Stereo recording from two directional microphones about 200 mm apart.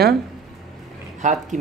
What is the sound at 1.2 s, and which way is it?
Speech, 40° right (ahead or behind).